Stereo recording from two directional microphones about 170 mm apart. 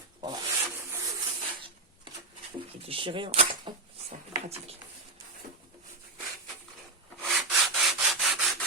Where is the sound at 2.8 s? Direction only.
30° right (ahead or behind).